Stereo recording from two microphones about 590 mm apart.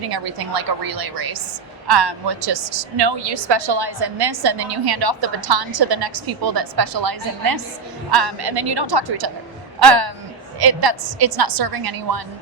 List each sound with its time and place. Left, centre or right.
0.1 s a woman's voice: right